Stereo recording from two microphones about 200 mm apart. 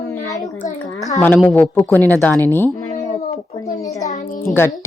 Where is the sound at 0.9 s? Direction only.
15° left (ahead or behind).